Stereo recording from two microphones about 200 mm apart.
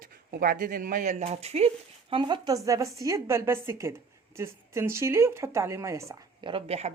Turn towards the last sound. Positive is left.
turn(degrees=-30)  # may be behind; listen again after turning